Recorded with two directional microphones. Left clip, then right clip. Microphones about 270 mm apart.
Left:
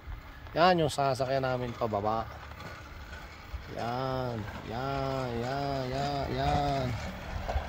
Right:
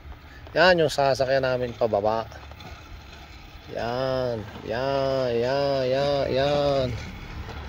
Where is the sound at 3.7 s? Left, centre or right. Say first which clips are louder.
Right 7 dB; centre.